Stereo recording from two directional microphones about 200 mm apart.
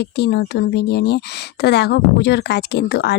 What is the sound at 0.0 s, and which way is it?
Speech, 55° left (ahead or behind).